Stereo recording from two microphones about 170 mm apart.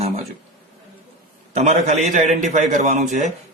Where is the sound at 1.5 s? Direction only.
40° right (ahead or behind).